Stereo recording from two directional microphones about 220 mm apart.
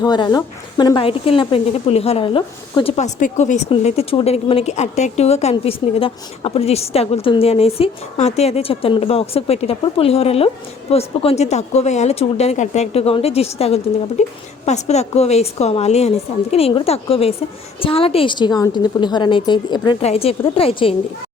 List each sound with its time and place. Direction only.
0.0 s speech: 20° left (ahead or behind)